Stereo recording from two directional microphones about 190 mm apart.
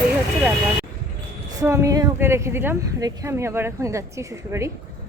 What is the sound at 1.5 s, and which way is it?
A woman's voice, 15° right (ahead or behind).